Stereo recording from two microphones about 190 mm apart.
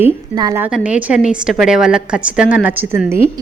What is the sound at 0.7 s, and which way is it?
A woman's voice, 5° right (ahead or behind).